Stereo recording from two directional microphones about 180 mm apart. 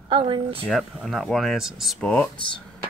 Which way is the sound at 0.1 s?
30° right (ahead or behind).